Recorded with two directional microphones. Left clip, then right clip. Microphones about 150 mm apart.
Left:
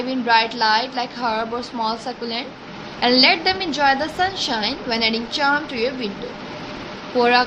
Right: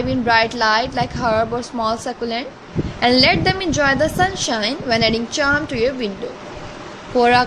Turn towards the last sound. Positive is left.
turn(degrees=-50)  # may be behind; listen again after turning